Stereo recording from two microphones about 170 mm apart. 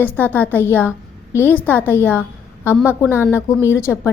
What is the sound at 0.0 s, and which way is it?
A woman's voice, 10° left (ahead or behind).